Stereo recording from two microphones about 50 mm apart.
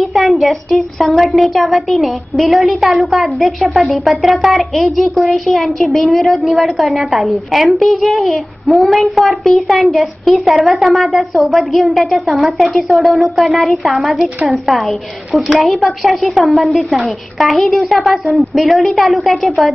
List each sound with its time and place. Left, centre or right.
0.0 s a woman's voice: centre
9.4 s a child's voice: left
9.8 s a woman's voice: centre